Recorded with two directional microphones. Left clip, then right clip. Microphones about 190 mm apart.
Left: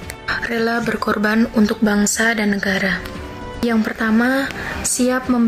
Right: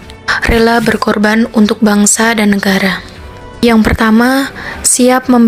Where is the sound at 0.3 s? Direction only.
45° right (ahead or behind).